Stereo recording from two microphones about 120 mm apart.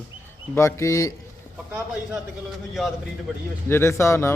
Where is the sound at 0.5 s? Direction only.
25° left (ahead or behind).